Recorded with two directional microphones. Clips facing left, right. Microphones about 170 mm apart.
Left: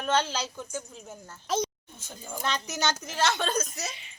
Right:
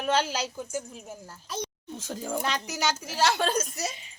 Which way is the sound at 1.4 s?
90° left.